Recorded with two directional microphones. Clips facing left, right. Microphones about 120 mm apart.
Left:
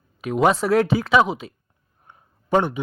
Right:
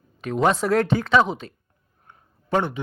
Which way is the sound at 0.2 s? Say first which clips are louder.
Left 2 dB; 5° left (ahead or behind).